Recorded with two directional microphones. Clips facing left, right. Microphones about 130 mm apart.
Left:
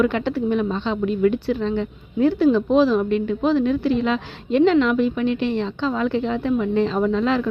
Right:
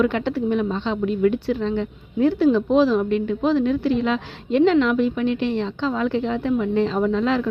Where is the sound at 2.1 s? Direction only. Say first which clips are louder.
Even; 35° left (ahead or behind).